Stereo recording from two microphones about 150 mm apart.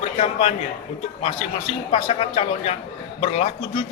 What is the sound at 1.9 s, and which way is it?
A man's voice, 40° left (ahead or behind).